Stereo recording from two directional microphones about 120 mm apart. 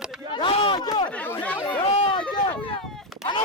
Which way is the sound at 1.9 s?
60° left (ahead or behind).